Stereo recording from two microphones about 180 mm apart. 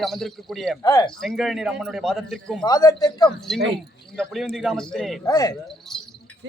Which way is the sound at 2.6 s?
20° left (ahead or behind).